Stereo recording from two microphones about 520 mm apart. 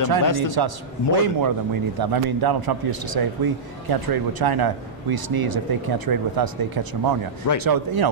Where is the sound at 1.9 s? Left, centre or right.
Right.